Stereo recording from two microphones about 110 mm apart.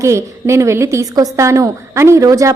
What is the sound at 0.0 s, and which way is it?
A woman's voice, 25° right (ahead or behind).